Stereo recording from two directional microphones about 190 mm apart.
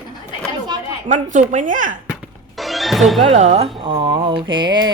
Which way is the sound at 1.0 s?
40° right (ahead or behind).